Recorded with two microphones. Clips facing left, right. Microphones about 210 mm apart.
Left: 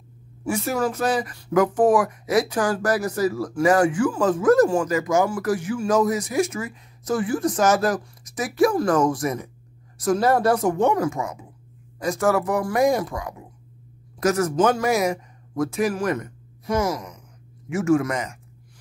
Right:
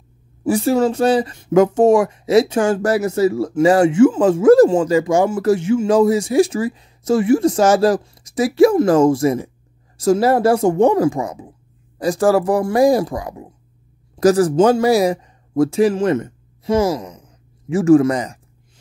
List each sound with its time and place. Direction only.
0.4 s speech: 30° right (ahead or behind)